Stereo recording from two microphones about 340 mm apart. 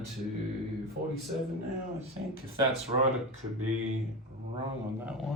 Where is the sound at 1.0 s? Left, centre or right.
Right.